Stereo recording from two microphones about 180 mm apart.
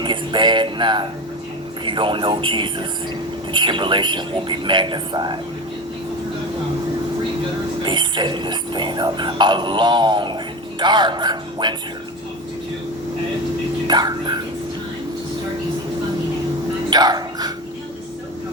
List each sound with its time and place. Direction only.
0.0 s music: 25° right (ahead or behind)
1.8 s speech: 25° right (ahead or behind)
7.8 s speech: 25° right (ahead or behind)
13.8 s speech: 25° right (ahead or behind)
16.9 s speech: 20° right (ahead or behind)